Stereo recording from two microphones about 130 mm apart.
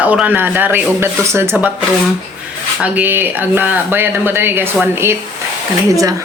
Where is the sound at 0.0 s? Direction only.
10° right (ahead or behind).